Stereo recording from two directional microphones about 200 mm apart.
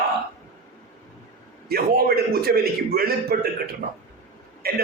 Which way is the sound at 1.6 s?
50° right (ahead or behind).